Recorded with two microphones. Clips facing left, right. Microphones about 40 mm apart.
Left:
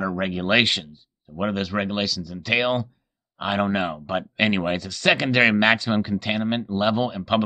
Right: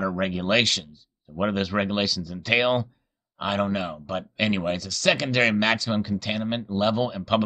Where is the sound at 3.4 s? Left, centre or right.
Centre.